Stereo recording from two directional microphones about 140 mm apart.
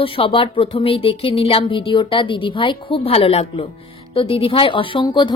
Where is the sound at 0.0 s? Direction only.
40° left (ahead or behind).